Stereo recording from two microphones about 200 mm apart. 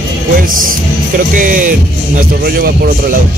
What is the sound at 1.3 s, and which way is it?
Speech, 40° right (ahead or behind).